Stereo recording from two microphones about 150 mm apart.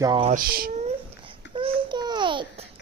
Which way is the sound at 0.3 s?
75° right (ahead or behind).